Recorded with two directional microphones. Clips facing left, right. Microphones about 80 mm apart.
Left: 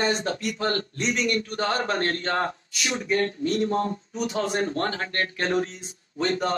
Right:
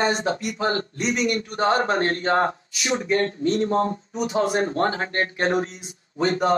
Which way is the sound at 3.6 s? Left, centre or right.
Right.